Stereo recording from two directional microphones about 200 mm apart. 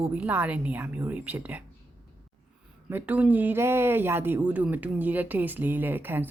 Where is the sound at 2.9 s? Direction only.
10° right (ahead or behind).